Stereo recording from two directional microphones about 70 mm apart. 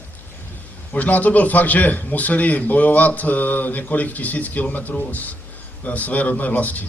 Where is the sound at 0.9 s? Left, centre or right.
Left.